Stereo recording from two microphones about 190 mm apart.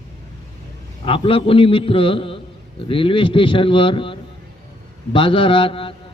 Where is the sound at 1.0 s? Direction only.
30° left (ahead or behind).